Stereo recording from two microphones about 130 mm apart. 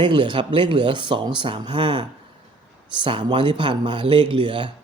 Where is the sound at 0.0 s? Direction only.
40° right (ahead or behind).